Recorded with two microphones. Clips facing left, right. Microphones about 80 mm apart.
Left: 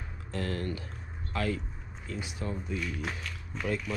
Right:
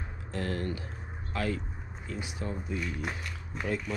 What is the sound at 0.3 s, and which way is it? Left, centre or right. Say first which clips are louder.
A man's voice: even; right.